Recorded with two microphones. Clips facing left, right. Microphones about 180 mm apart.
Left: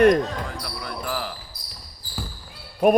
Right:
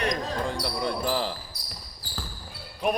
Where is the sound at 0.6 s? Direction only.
25° right (ahead or behind).